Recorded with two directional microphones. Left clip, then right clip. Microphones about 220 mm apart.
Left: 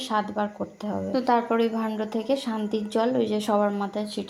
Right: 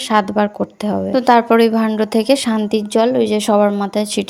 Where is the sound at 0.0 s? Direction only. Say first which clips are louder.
Right 11 dB; 30° right (ahead or behind).